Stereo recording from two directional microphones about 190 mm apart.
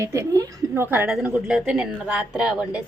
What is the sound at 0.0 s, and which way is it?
A woman's voice, 15° right (ahead or behind).